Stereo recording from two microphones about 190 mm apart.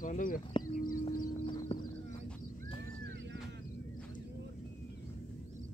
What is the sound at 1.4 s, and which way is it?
Clip-clop, 25° left (ahead or behind).